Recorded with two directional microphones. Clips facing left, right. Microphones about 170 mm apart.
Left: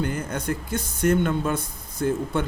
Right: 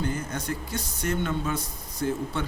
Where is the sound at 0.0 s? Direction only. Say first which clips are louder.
Left 3 dB; 55° left (ahead or behind).